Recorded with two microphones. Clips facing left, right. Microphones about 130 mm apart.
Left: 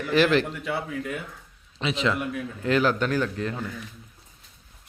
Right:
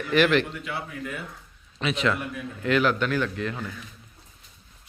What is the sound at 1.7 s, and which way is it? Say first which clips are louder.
A man's voice: even; 25° left (ahead or behind).